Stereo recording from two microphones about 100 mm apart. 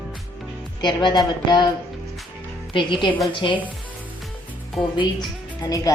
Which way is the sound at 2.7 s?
55° left (ahead or behind).